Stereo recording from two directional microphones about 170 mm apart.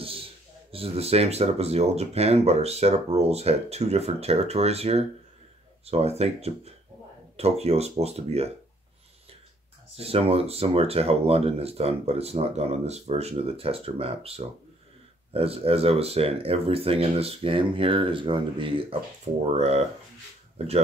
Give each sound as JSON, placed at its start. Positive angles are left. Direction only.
{"t": 0.0, "sound": "speech", "side_deg": -35}
{"t": 9.9, "sound": "speech", "side_deg": -35}